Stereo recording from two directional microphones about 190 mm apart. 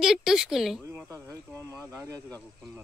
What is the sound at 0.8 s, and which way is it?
Speech, 15° right (ahead or behind).